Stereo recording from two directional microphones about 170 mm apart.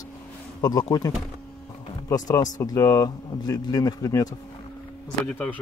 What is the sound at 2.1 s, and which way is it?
Speech, 20° left (ahead or behind).